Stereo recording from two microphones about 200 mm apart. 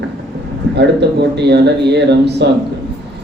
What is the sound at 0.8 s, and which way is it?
Speech, 60° right (ahead or behind).